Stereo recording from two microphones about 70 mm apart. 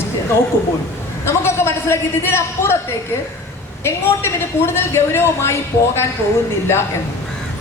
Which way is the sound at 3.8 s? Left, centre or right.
Left.